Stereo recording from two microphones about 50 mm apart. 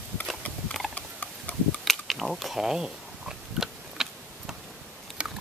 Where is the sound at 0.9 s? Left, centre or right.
Left.